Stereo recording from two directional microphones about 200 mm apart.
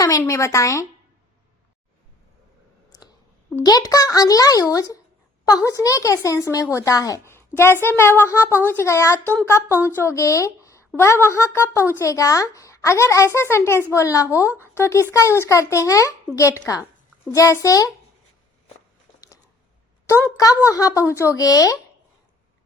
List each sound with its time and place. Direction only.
0.0 s speech: 15° left (ahead or behind)
3.5 s speech: 20° left (ahead or behind)
20.1 s speech: 15° left (ahead or behind)